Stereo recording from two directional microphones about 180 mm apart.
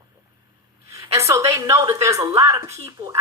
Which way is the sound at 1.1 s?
15° right (ahead or behind).